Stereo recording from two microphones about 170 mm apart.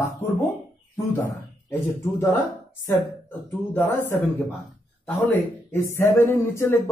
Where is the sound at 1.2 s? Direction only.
15° left (ahead or behind).